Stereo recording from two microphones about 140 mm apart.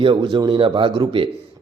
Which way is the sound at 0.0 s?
35° right (ahead or behind).